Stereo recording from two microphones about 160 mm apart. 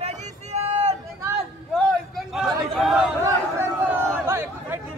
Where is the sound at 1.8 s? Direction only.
Centre (ahead or behind).